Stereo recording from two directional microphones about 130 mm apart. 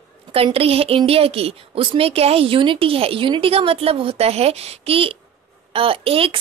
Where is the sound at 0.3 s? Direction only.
45° right (ahead or behind).